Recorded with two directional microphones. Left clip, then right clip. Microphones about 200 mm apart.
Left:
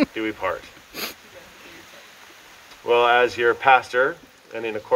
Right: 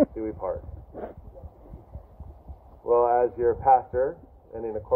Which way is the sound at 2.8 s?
35° left (ahead or behind).